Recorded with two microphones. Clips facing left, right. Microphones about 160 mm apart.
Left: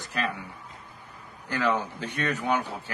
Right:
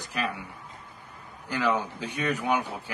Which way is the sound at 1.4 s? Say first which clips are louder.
Even; 10° right (ahead or behind).